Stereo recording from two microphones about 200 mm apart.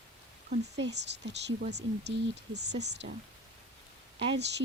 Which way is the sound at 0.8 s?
60° right (ahead or behind).